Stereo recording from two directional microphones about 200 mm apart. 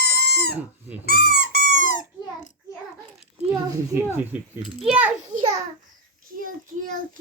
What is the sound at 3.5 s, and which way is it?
A child's voice, 15° right (ahead or behind).